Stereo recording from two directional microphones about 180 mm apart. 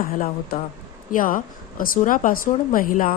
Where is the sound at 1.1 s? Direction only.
50° left (ahead or behind).